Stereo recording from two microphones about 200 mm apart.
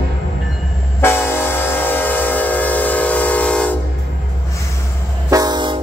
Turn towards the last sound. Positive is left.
turn(degrees=-20)  # may be behind; listen again after turning